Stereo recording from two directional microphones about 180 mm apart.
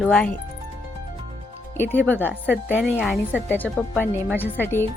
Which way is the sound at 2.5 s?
10° right (ahead or behind).